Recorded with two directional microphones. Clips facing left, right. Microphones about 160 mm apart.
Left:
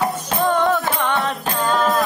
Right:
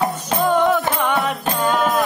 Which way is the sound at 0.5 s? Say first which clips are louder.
Right 2 dB; 10° right (ahead or behind).